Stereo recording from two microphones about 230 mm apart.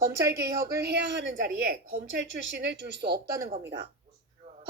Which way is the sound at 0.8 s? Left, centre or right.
Right.